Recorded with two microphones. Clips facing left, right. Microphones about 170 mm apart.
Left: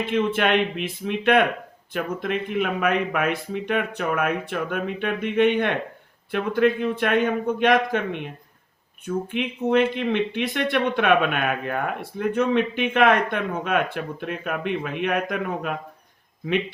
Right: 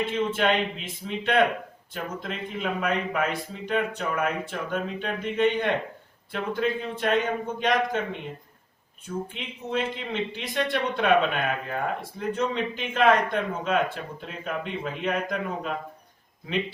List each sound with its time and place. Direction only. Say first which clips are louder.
0.0 s speech: left 3 dB; 65° left (ahead or behind)